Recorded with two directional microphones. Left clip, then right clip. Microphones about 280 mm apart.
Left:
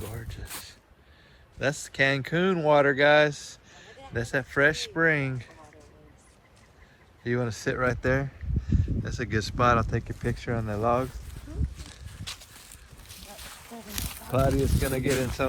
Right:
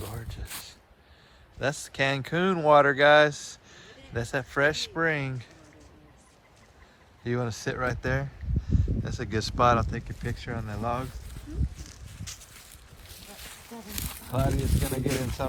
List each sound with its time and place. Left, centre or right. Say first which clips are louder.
1.5 s speech: left 2 dB; centre
7.3 s speech: left 2 dB; centre
14.3 s speech: left 5 dB; centre